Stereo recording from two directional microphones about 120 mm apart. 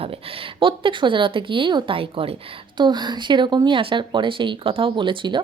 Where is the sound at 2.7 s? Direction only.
40° right (ahead or behind).